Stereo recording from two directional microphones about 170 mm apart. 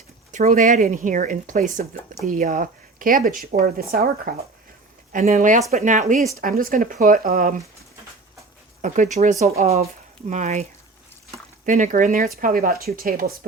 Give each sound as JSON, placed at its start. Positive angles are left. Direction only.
{"t": 0.3, "sound": "speech", "side_deg": -50}
{"t": 5.1, "sound": "speech", "side_deg": -50}
{"t": 8.8, "sound": "speech", "side_deg": -45}